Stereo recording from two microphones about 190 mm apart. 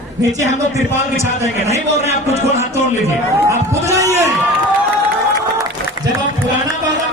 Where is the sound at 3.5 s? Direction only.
15° right (ahead or behind).